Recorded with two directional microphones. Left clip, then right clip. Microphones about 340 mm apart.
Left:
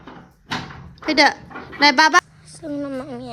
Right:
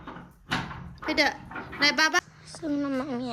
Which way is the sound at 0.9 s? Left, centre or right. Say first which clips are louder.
Left 9 dB; centre.